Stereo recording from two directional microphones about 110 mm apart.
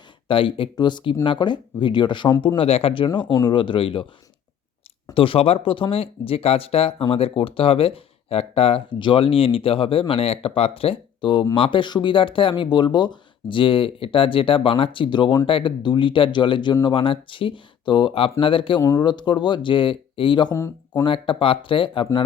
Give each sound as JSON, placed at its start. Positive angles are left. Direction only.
{"t": 0.3, "sound": "speech", "side_deg": 50}
{"t": 2.6, "sound": "speech", "side_deg": 60}
{"t": 5.1, "sound": "speech", "side_deg": 55}
{"t": 18.8, "sound": "speech", "side_deg": 30}
{"t": 19.0, "sound": "speech", "side_deg": 40}
{"t": 20.5, "sound": "speech", "side_deg": 30}
{"t": 21.0, "sound": "speech", "side_deg": 50}